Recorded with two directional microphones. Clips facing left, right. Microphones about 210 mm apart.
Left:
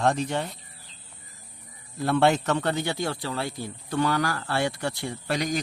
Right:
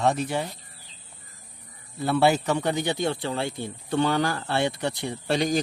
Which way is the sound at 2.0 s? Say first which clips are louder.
Even; centre (ahead or behind).